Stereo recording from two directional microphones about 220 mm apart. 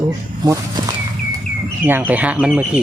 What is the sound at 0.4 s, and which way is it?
Speech, 15° right (ahead or behind).